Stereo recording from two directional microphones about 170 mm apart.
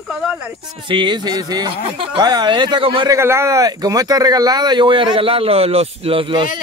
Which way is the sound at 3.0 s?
15° right (ahead or behind).